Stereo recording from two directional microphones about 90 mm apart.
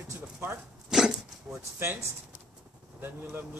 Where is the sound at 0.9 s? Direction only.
5° right (ahead or behind).